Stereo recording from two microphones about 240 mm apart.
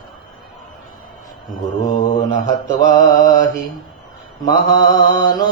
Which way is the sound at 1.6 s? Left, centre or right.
Centre.